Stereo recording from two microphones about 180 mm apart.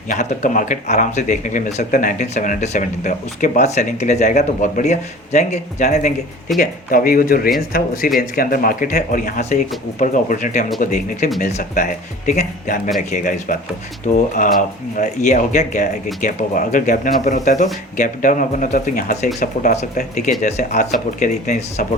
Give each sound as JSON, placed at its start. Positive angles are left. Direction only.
{"t": 0.1, "sound": "speech", "side_deg": 45}